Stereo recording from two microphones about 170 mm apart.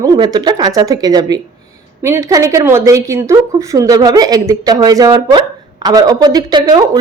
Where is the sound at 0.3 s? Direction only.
25° right (ahead or behind).